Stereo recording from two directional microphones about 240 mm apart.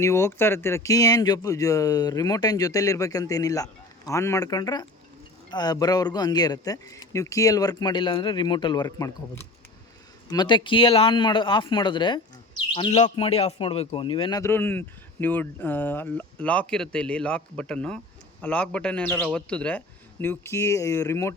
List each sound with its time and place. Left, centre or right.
0.0 s a man's voice: centre